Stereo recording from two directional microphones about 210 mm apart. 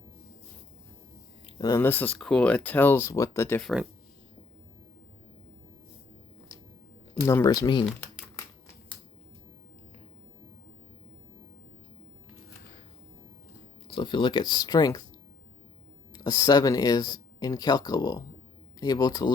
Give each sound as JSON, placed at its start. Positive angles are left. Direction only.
{"t": 1.5, "sound": "speech", "side_deg": 15}
{"t": 7.3, "sound": "speech", "side_deg": 15}
{"t": 13.9, "sound": "speech", "side_deg": 25}
{"t": 16.1, "sound": "speech", "side_deg": 15}